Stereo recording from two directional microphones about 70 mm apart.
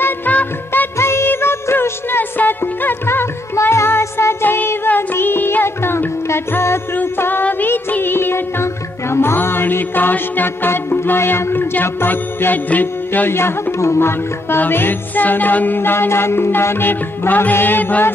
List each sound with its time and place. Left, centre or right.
0.0 s music: left
0.9 s music: left